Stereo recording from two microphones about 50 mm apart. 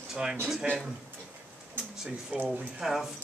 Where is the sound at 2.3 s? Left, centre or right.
Right.